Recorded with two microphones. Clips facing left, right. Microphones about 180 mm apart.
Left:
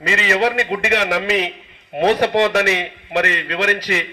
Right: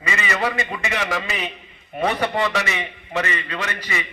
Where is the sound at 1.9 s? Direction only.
75° left (ahead or behind).